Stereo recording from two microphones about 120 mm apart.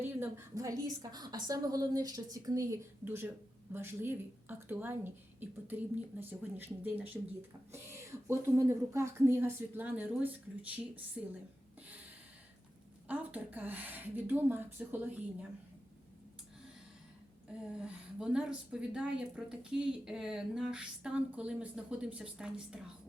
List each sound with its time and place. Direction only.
0.0 s a woman's voice: 15° right (ahead or behind)
13.1 s a woman's voice: 15° right (ahead or behind)
17.8 s a woman's voice: 5° right (ahead or behind)